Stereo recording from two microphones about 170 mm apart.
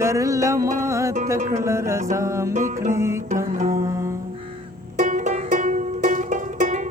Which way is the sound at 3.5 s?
55° right (ahead or behind).